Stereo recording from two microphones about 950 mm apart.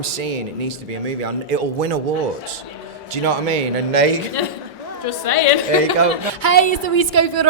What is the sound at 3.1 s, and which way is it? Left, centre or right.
A man's voice, right.